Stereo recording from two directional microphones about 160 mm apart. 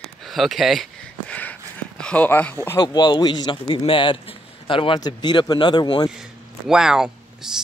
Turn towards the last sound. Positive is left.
turn(degrees=-5)  # may be behind; listen again after turning